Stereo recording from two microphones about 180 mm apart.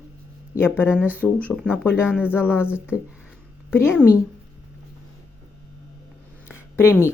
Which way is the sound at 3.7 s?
10° left (ahead or behind).